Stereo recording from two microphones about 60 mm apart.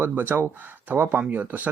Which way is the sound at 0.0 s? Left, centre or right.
Right.